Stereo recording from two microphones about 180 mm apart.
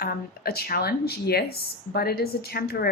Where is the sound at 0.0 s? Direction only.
60° left (ahead or behind).